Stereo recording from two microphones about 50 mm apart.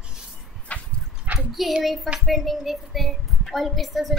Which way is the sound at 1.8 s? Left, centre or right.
Centre.